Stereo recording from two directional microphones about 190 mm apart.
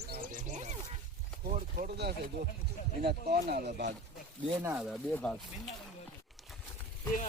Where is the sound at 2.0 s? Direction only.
60° right (ahead or behind).